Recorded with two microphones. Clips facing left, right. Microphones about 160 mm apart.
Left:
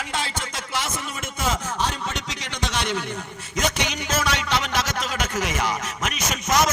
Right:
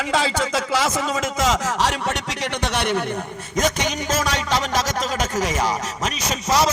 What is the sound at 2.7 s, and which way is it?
Speech, 60° right (ahead or behind).